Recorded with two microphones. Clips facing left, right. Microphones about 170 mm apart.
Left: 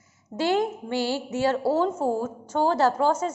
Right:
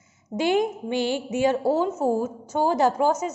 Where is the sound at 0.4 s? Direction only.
15° right (ahead or behind).